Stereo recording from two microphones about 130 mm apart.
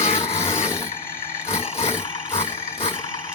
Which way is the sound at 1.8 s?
55° left (ahead or behind).